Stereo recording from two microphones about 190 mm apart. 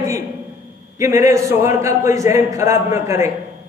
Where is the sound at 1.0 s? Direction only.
15° right (ahead or behind).